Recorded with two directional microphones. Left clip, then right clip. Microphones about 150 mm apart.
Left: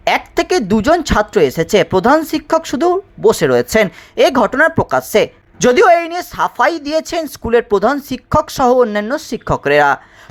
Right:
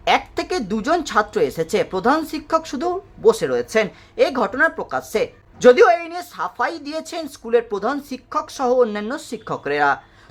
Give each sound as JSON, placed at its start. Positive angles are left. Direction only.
{"t": 0.0, "sound": "speech", "side_deg": 30}